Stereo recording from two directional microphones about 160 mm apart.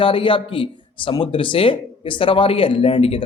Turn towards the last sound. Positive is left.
turn(degrees=35)  # may be behind; listen again after turning